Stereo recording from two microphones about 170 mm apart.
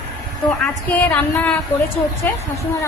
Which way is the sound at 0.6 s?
10° left (ahead or behind).